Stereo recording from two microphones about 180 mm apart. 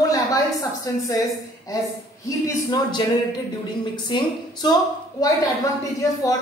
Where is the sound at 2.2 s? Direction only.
20° left (ahead or behind).